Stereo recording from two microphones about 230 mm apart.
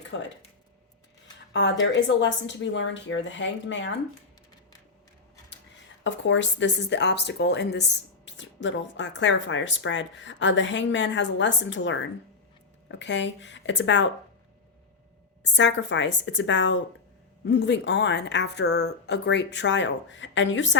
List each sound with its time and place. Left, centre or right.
0.1 s a woman's voice: left
1.5 s a woman's voice: left
6.0 s a woman's voice: left
15.4 s a woman's voice: left